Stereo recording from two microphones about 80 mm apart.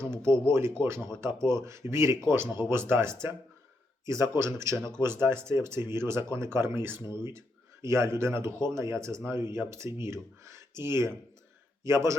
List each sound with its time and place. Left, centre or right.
0.0 s speech: right
4.7 s speech: centre
4.9 s speech: right